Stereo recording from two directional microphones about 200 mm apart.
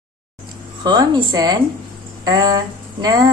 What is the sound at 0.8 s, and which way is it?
Speech, 20° right (ahead or behind).